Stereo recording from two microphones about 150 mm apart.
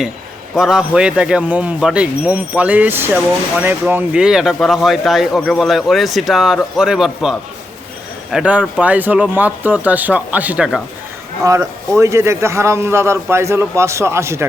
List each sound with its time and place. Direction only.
0.5 s speech: 5° right (ahead or behind)
11.4 s a man's voice: 20° right (ahead or behind)